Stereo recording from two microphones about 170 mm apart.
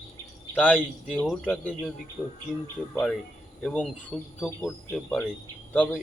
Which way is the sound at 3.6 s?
5° left (ahead or behind).